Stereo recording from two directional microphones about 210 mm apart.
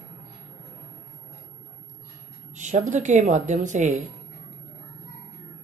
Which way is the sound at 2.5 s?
35° right (ahead or behind).